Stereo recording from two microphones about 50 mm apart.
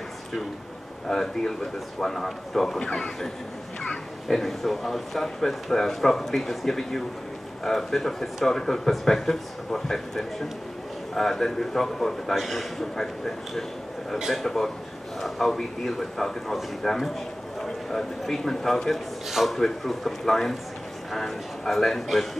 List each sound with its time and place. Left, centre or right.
1.0 s a man's voice: centre
4.3 s a man's voice: centre
19.2 s a man's voice: centre